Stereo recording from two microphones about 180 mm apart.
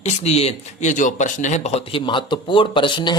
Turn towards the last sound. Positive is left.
turn(degrees=25)  # may be behind; listen again after turning